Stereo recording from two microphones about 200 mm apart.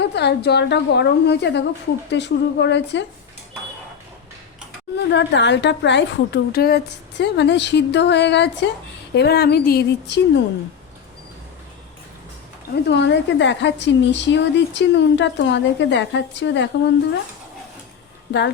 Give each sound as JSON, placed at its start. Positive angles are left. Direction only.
{"t": 0.0, "sound": "a woman's voice", "side_deg": 55}
{"t": 5.1, "sound": "a woman's voice", "side_deg": 60}
{"t": 12.7, "sound": "a woman's voice", "side_deg": 60}
{"t": 18.3, "sound": "speech", "side_deg": 60}